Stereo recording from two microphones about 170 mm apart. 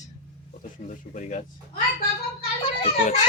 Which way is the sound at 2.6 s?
35° left (ahead or behind).